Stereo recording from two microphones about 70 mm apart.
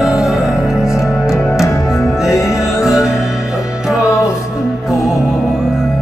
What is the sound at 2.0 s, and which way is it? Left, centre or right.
Music, centre.